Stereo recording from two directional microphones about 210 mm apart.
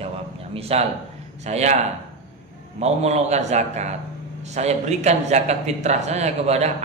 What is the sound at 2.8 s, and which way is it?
A man's voice, 30° right (ahead or behind).